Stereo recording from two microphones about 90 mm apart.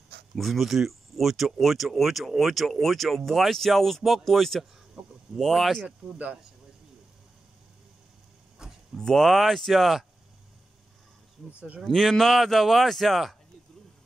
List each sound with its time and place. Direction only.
0.4 s speech: centre (ahead or behind)
5.9 s speech: 15° right (ahead or behind)
8.9 s speech: 5° left (ahead or behind)
11.8 s speech: 5° left (ahead or behind)